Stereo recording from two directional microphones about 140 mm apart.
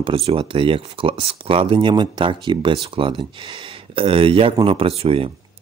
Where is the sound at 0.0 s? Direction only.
40° right (ahead or behind).